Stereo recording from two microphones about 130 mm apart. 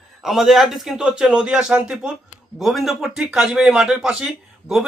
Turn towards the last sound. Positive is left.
turn(degrees=-5)  # may be behind; listen again after turning